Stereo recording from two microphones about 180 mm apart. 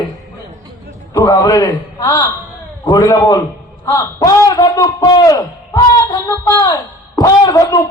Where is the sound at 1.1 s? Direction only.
20° left (ahead or behind).